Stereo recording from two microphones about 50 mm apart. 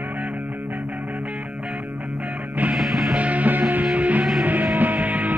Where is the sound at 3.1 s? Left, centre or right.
Right.